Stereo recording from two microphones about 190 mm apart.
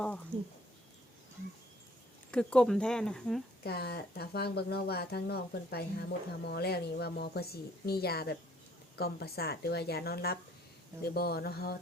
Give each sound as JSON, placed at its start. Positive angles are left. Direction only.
{"t": 2.3, "sound": "speech", "side_deg": 5}
{"t": 3.6, "sound": "speech", "side_deg": 55}